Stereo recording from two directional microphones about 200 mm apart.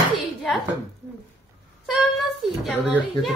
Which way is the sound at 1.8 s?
Centre (ahead or behind).